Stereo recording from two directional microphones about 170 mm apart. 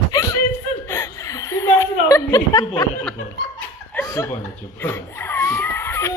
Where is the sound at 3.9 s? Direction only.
15° left (ahead or behind).